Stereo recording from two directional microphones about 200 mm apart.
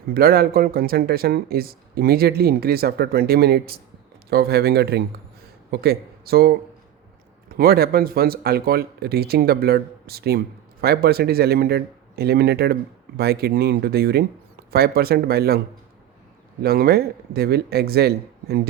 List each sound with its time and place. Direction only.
0.1 s speech: 50° right (ahead or behind)